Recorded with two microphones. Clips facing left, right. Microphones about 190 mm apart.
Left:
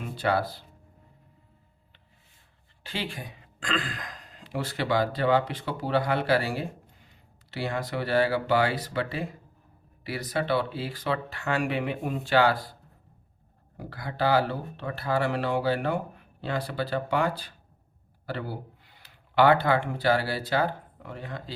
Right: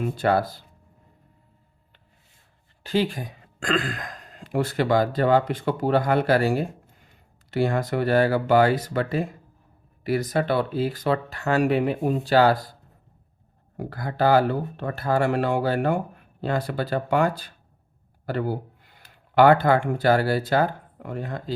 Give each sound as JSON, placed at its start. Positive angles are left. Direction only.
{"t": 0.2, "sound": "speech", "side_deg": -45}
{"t": 2.8, "sound": "speech", "side_deg": -40}
{"t": 13.7, "sound": "speech", "side_deg": -45}